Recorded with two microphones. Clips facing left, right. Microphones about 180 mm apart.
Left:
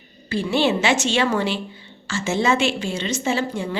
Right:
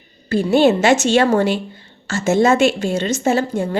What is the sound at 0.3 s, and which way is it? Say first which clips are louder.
A woman's voice: right 7 dB; 45° right (ahead or behind).